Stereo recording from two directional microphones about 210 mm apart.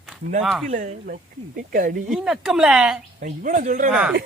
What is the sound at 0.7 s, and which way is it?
Speech, 35° right (ahead or behind).